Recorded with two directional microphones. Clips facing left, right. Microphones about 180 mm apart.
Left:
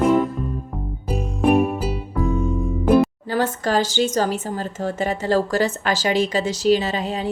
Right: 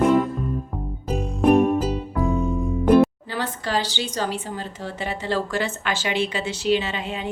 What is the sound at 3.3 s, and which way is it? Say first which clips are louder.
Speech: left 5 dB; 45° left (ahead or behind).